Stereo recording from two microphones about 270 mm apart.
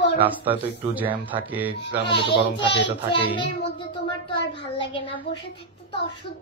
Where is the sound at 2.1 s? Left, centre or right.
Centre.